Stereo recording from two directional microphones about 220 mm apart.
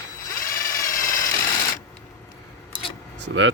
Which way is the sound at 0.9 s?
35° left (ahead or behind).